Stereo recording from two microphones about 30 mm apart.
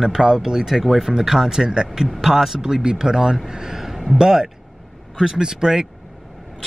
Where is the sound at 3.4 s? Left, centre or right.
Right.